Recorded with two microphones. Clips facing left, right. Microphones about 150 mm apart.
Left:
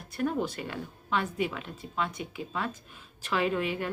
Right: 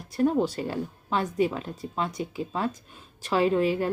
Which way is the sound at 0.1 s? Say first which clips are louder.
Right 6 dB; 30° right (ahead or behind).